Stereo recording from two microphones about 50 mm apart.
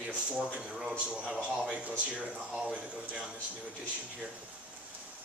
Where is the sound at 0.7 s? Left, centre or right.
Centre.